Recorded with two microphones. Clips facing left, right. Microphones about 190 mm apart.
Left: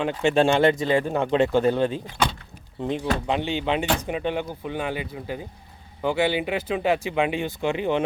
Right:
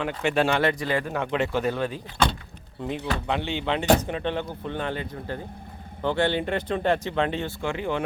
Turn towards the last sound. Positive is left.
turn(degrees=20)  # may be behind; listen again after turning